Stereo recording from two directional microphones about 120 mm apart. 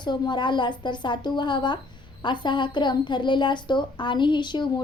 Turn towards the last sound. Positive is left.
turn(degrees=40)  # may be behind; listen again after turning